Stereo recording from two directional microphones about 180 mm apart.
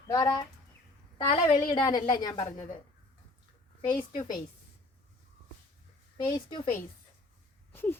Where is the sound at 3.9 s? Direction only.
45° left (ahead or behind).